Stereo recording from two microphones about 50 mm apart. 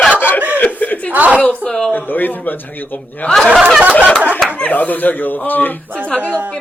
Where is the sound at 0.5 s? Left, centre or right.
Left.